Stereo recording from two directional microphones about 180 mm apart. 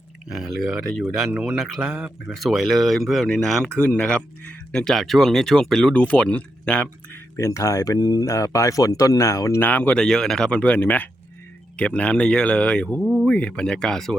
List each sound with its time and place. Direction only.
0.3 s speech: centre (ahead or behind)
7.3 s speech: 15° left (ahead or behind)
13.0 s speech: 5° right (ahead or behind)